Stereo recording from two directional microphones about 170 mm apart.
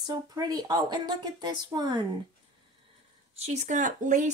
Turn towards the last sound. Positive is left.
turn(degrees=-50)  # may be behind; listen again after turning